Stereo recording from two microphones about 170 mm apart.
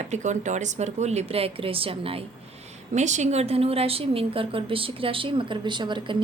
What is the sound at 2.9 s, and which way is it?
A woman's voice, 45° right (ahead or behind).